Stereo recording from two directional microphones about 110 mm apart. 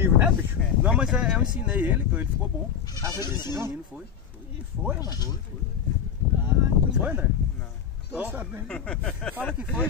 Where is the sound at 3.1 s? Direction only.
35° left (ahead or behind).